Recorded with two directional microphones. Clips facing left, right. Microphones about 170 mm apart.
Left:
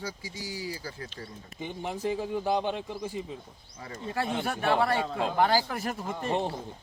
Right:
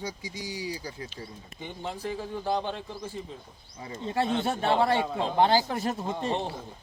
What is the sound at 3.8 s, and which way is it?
Speech, 25° right (ahead or behind).